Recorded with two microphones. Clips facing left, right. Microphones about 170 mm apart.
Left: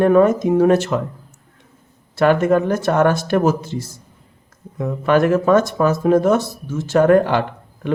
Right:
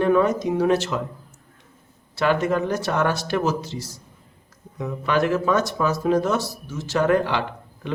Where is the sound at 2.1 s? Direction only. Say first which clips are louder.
Left 6 dB; 50° left (ahead or behind).